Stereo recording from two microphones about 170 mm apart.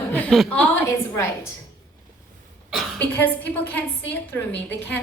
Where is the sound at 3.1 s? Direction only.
10° left (ahead or behind).